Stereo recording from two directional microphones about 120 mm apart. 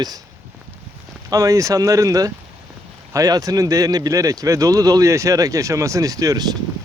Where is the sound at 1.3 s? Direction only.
30° right (ahead or behind).